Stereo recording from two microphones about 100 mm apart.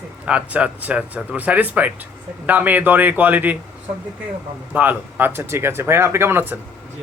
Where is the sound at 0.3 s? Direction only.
10° right (ahead or behind).